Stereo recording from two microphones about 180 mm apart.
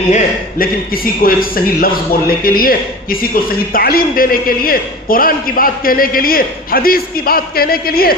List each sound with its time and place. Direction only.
0.1 s a man's voice: 45° left (ahead or behind)